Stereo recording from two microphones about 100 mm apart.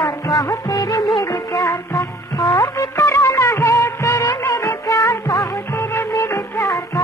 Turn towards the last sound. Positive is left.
turn(degrees=30)  # may be behind; listen again after turning